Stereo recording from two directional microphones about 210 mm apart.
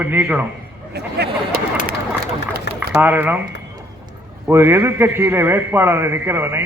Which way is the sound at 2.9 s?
10° right (ahead or behind).